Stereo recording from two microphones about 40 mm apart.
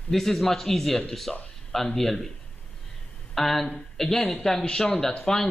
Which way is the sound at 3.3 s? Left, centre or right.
Centre.